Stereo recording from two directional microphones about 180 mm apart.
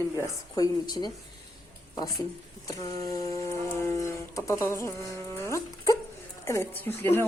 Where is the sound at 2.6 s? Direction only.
20° left (ahead or behind).